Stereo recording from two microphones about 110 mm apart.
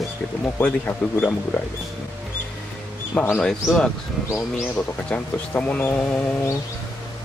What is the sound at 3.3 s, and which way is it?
Speech, 5° left (ahead or behind).